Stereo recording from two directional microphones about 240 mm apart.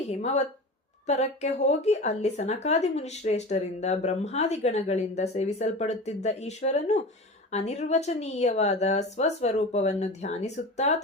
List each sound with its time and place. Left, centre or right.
0.1 s a woman's voice: left